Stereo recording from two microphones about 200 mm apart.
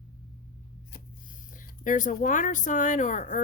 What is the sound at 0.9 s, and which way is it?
Speech, 45° left (ahead or behind).